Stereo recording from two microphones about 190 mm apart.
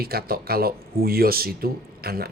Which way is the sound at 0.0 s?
55° right (ahead or behind).